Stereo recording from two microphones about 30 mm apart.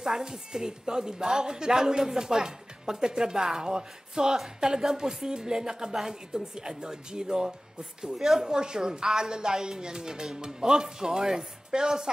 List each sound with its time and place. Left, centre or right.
0.0 s a woman's voice: centre